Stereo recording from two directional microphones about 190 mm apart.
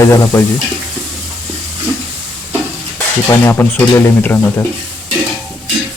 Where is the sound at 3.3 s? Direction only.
10° left (ahead or behind).